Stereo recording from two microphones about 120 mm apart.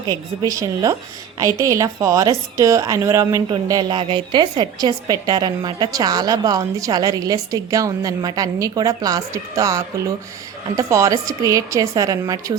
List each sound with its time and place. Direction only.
0.4 s a woman's voice: 30° right (ahead or behind)